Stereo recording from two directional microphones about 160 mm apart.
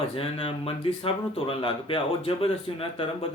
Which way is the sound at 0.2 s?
35° left (ahead or behind).